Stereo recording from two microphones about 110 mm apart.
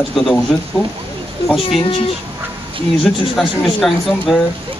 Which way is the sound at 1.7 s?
60° left (ahead or behind).